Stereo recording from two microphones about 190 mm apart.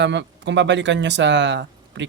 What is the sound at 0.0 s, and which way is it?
Speech, 70° right (ahead or behind).